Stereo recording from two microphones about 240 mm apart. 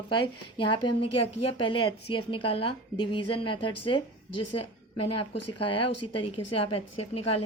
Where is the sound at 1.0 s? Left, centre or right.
Left.